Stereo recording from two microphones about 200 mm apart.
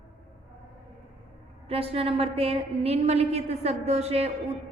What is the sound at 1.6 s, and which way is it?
A woman's voice, 30° right (ahead or behind).